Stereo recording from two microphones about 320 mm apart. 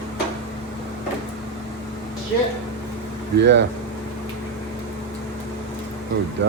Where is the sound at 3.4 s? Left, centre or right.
Right.